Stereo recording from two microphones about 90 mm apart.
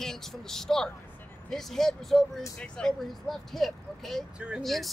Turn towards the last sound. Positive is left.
turn(degrees=0)  # may be behind; listen again after turning